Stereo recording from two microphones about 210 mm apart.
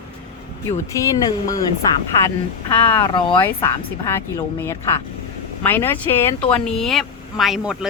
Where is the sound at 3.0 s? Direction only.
25° left (ahead or behind).